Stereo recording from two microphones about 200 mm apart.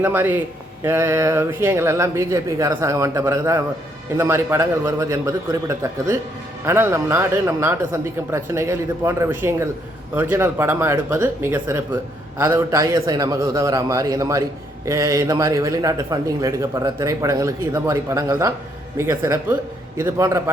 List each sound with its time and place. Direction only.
0.0 s a man's voice: 10° right (ahead or behind)